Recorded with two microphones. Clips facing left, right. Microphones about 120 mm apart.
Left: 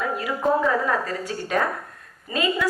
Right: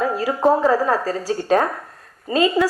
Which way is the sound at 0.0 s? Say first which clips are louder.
Right 6 dB; 30° right (ahead or behind).